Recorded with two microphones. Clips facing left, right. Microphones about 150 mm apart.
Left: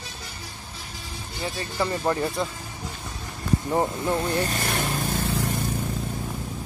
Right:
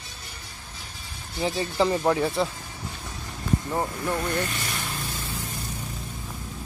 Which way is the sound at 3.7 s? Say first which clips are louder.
Left 4 dB; 20° left (ahead or behind).